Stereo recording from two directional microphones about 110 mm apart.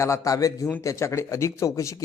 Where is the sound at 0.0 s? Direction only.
30° left (ahead or behind).